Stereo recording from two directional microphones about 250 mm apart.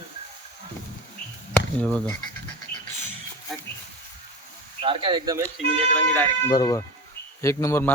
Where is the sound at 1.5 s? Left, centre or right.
Centre.